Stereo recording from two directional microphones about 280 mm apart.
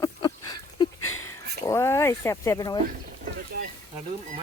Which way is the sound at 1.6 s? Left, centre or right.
Centre.